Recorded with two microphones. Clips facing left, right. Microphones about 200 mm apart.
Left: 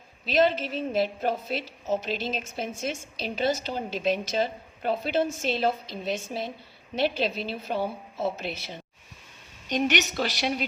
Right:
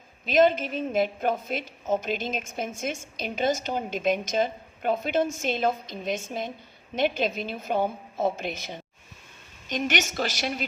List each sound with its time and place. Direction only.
0.3 s a woman's voice: 50° right (ahead or behind)